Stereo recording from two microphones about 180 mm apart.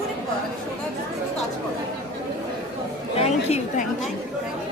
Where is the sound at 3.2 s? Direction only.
35° left (ahead or behind).